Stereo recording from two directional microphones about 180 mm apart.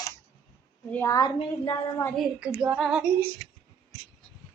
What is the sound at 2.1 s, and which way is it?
Female singing, 5° right (ahead or behind).